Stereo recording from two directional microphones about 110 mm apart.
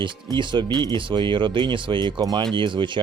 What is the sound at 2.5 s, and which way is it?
Speech, 50° right (ahead or behind).